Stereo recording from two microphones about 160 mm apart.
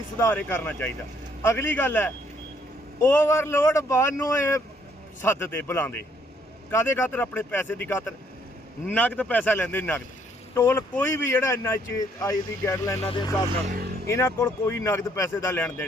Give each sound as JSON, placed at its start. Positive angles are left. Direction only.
{"t": 0.2, "sound": "speech", "side_deg": 15}
{"t": 13.0, "sound": "speech", "side_deg": 35}
{"t": 13.7, "sound": "speech", "side_deg": -60}
{"t": 14.1, "sound": "speech", "side_deg": 15}